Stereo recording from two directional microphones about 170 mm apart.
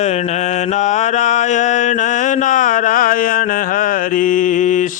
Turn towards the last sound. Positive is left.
turn(degrees=50)  # may be behind; listen again after turning